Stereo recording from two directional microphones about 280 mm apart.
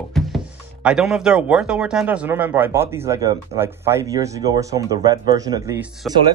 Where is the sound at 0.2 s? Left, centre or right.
Centre.